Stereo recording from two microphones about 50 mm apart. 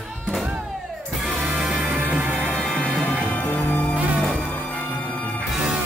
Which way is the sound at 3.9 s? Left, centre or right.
Right.